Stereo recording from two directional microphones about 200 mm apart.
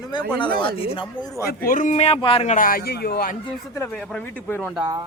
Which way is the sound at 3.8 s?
10° left (ahead or behind).